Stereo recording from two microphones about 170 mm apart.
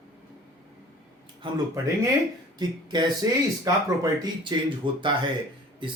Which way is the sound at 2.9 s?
25° right (ahead or behind).